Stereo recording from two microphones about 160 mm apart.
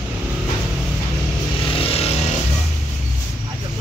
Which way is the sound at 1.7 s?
35° left (ahead or behind).